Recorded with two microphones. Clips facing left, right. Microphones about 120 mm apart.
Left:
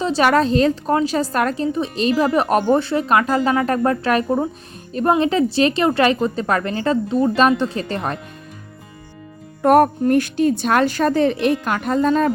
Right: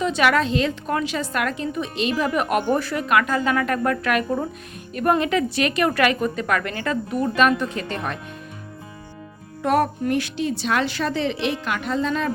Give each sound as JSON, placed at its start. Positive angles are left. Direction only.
{"t": 0.0, "sound": "a woman's voice", "side_deg": 35}
{"t": 9.6, "sound": "a woman's voice", "side_deg": 50}